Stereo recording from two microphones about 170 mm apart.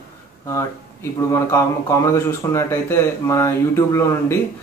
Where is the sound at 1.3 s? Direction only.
15° left (ahead or behind).